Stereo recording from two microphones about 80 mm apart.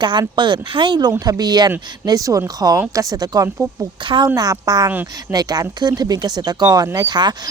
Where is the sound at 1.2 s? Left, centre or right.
Right.